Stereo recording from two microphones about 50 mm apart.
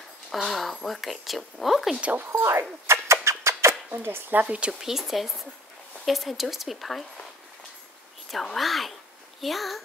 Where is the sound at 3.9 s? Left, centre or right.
Right.